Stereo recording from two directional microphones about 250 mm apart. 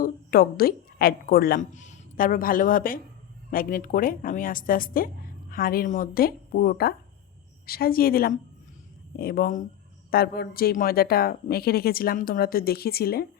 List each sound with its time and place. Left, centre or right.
0.0 s a woman's voice: left